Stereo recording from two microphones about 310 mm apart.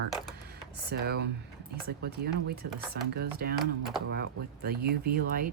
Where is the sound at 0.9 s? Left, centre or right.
Right.